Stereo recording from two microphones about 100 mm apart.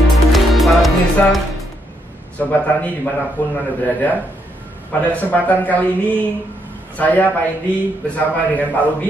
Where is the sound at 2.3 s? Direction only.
15° left (ahead or behind).